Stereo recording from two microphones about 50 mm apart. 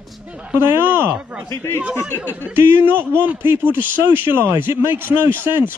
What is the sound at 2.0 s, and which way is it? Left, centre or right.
A man's voice, right.